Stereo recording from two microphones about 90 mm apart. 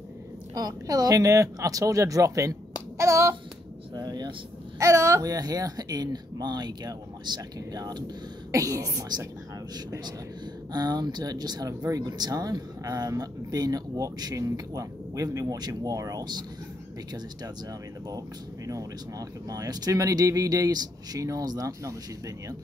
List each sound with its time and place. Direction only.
0.6 s speech: 40° right (ahead or behind)
3.0 s a sound: 35° right (ahead or behind)
3.9 s speech: 50° right (ahead or behind)
4.7 s speech: 35° right (ahead or behind)
10.7 s speech: 50° right (ahead or behind)
18.7 s speech: 40° right (ahead or behind)